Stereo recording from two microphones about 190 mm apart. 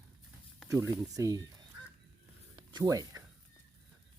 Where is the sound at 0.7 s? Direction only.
15° right (ahead or behind).